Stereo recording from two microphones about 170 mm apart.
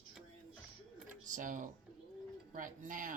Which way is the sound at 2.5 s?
50° right (ahead or behind).